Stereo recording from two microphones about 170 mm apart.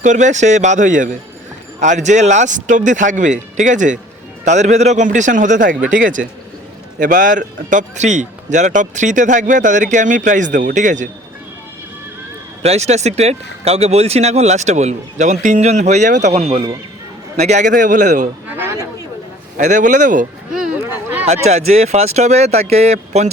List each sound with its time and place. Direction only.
0.0 s speech: 45° right (ahead or behind)
12.6 s speech: 40° right (ahead or behind)
18.4 s speech: 15° right (ahead or behind)
19.5 s speech: 45° right (ahead or behind)
20.5 s a sound: 5° right (ahead or behind)
21.4 s speech: 40° right (ahead or behind)